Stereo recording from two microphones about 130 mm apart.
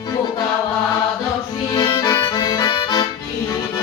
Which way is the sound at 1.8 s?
30° left (ahead or behind).